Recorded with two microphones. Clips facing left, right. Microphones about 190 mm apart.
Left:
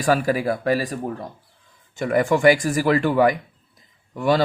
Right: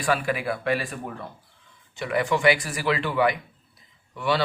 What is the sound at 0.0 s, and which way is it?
Speech, 40° left (ahead or behind).